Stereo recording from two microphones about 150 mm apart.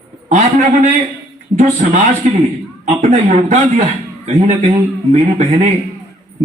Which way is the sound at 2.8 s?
50° right (ahead or behind).